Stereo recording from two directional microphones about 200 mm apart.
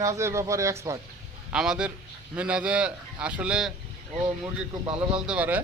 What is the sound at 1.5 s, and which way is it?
A man's voice, 5° right (ahead or behind).